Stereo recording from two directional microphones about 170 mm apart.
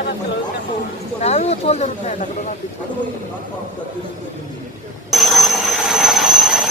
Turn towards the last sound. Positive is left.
turn(degrees=0)  # may be behind; listen again after turning